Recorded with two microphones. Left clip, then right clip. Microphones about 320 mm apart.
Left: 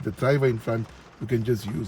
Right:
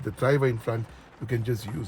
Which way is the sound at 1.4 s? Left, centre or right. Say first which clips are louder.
Left 5 dB; centre.